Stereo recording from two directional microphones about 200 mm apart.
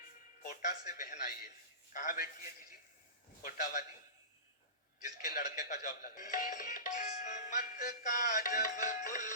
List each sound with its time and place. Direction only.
0.5 s a man's voice: 40° left (ahead or behind)
5.2 s speech: 45° left (ahead or behind)